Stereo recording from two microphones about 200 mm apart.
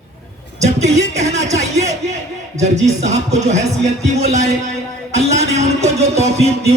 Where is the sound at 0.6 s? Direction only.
35° right (ahead or behind).